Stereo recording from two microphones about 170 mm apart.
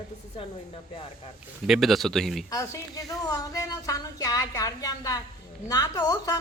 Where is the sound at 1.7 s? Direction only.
Centre (ahead or behind).